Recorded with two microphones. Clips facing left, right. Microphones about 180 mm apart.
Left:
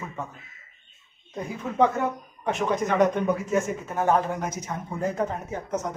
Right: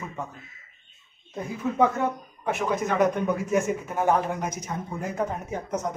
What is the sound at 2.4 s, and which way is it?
Speech, 5° right (ahead or behind).